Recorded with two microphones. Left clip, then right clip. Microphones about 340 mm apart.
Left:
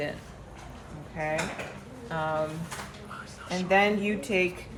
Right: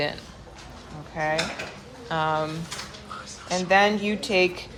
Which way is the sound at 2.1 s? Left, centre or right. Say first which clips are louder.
Right 6 dB; centre.